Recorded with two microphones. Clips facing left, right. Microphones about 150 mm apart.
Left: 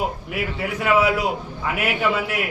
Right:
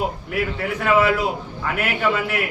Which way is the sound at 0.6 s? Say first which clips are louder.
Even; 10° left (ahead or behind).